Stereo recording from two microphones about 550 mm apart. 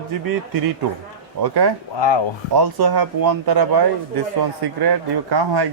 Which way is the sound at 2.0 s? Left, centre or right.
Left.